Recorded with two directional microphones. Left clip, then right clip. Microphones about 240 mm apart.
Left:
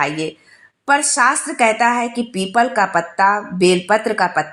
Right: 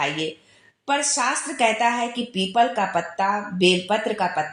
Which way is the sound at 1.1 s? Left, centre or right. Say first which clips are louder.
Left 8 dB; left.